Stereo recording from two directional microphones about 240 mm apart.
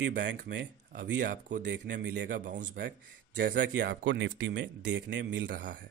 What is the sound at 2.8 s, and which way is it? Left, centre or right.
Speech, right.